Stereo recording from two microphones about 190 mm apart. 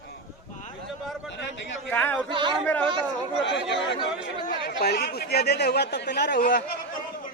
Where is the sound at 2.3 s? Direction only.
25° right (ahead or behind).